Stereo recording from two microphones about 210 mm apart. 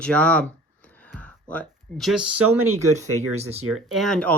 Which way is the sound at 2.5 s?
90° right.